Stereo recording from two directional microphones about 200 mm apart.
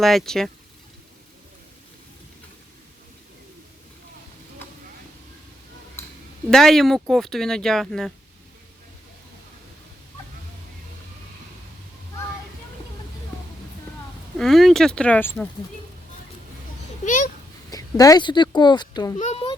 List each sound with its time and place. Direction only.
0.0 s speech: centre (ahead or behind)
6.0 s a sound: 10° left (ahead or behind)
6.5 s speech: centre (ahead or behind)
14.3 s speech: centre (ahead or behind)
17.1 s speech: 40° left (ahead or behind)
17.7 s speech: 20° left (ahead or behind)
19.2 s children playing: 30° left (ahead or behind)